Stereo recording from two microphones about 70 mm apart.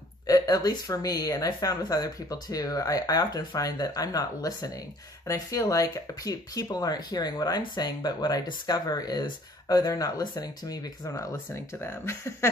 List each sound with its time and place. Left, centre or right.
0.3 s speech: left
5.2 s speech: left
9.8 s speech: left
11.3 s speech: left